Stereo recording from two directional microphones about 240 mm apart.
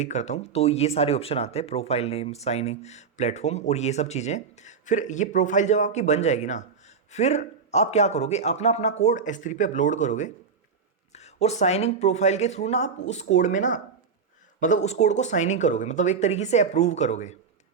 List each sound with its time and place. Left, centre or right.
0.0 s speech: left